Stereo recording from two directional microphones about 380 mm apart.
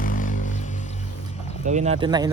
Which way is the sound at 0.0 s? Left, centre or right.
Left.